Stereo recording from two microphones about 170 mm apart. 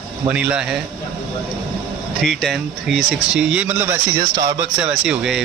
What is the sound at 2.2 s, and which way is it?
Speech, centre (ahead or behind).